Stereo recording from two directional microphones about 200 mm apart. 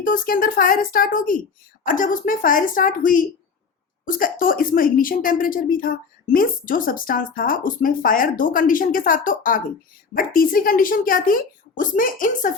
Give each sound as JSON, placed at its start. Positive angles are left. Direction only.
{"t": 0.0, "sound": "speech", "side_deg": 45}